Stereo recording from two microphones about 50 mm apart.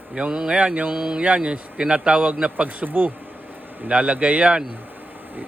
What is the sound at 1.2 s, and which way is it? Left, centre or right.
A man's voice, right.